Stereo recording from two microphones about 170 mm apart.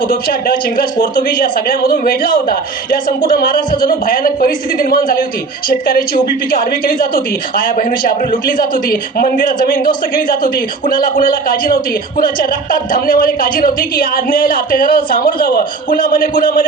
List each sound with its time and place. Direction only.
0.1 s speech: 55° left (ahead or behind)